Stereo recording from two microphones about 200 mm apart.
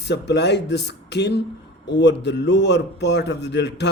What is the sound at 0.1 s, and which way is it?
Speech, 55° left (ahead or behind).